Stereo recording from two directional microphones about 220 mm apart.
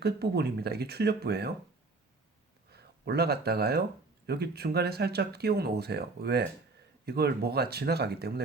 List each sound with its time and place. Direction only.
0.0 s speech: 45° right (ahead or behind)
2.7 s speech: 45° right (ahead or behind)